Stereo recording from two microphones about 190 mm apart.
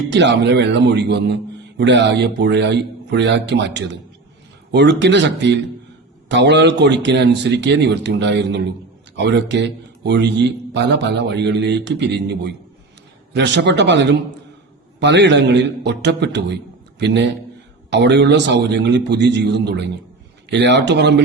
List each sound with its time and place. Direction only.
0.1 s a man's voice: 65° right (ahead or behind)
17.9 s a man's voice: 70° right (ahead or behind)